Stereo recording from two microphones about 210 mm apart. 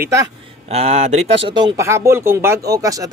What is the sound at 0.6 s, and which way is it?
Speech, 30° right (ahead or behind).